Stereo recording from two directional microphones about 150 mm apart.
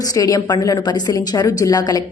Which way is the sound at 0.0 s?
25° left (ahead or behind).